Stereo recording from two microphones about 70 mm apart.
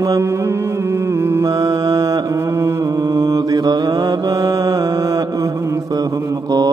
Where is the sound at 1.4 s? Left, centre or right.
Right.